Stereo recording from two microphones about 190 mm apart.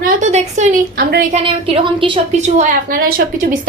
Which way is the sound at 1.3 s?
30° right (ahead or behind).